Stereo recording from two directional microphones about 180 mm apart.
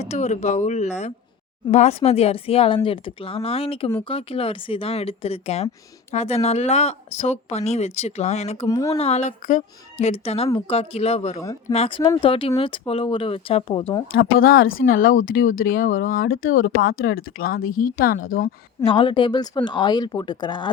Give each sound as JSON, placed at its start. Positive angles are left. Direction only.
{"t": 0.0, "sound": "speech", "side_deg": 40}
{"t": 8.6, "sound": "speech", "side_deg": 20}
{"t": 9.0, "sound": "speech", "side_deg": 35}
{"t": 14.4, "sound": "speech", "side_deg": 55}
{"t": 15.0, "sound": "speech", "side_deg": 90}
{"t": 15.6, "sound": "speech", "side_deg": 50}
{"t": 16.4, "sound": "speech", "side_deg": 90}
{"t": 18.9, "sound": "speech", "side_deg": 25}